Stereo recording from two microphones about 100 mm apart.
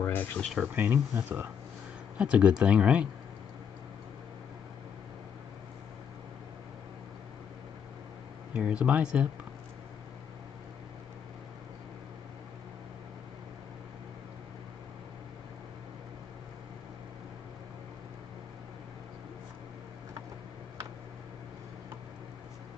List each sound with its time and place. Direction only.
0.0 s a sound: 20° left (ahead or behind)
0.4 s speech: centre (ahead or behind)
0.7 s speech: 20° right (ahead or behind)
8.5 s speech: 10° right (ahead or behind)